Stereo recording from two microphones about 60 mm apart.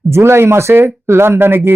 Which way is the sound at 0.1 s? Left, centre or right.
Right.